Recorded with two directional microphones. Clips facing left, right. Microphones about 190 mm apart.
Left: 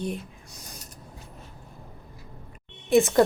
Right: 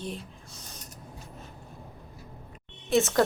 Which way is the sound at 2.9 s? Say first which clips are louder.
Left 4 dB; 15° left (ahead or behind).